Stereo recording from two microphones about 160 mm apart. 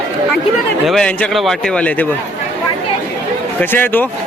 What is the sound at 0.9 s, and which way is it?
Speech, 5° left (ahead or behind).